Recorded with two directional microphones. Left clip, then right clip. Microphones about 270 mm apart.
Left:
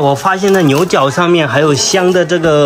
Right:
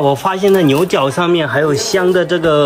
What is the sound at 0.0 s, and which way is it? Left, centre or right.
Speech, centre.